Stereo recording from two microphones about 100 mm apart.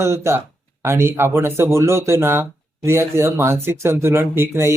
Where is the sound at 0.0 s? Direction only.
25° right (ahead or behind).